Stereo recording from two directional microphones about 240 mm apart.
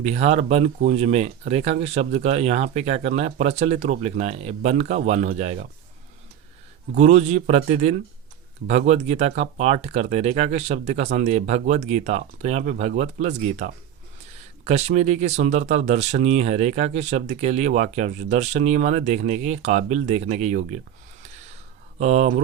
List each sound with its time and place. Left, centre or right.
0.0 s speech: right
6.9 s speech: right
21.9 s speech: right